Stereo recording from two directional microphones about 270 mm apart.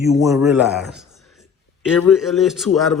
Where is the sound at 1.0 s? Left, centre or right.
Centre.